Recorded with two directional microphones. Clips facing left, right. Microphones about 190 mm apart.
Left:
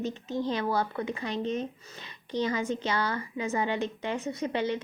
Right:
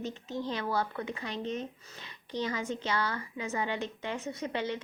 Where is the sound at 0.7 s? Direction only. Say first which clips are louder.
Left 3 dB; 45° left (ahead or behind).